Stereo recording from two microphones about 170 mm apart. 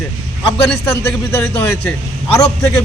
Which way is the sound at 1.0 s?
15° left (ahead or behind).